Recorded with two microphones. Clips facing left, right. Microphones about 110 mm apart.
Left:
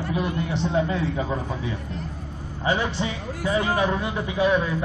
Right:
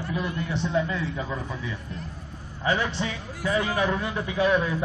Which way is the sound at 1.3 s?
25° left (ahead or behind).